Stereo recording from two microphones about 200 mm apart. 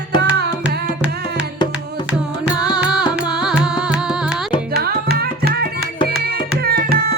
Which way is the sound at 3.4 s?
5° right (ahead or behind).